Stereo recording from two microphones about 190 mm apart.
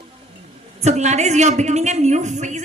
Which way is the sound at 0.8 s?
35° right (ahead or behind).